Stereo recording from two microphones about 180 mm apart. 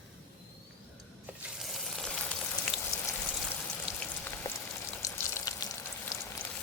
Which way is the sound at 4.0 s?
10° left (ahead or behind).